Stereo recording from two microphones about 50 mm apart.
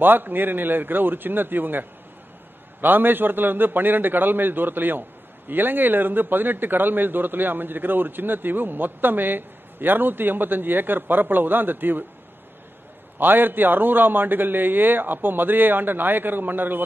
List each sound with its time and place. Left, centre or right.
0.0 s a man's voice: right
13.2 s a man's voice: right